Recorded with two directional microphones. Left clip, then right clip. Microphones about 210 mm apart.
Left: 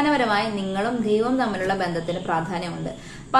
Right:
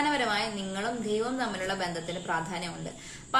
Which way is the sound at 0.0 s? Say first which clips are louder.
Left 7 dB; centre (ahead or behind).